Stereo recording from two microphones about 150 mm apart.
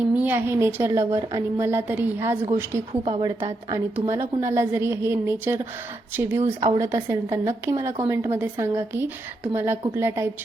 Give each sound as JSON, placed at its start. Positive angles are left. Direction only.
{"t": 0.0, "sound": "a woman's voice", "side_deg": -10}
{"t": 2.9, "sound": "a woman's voice", "side_deg": -35}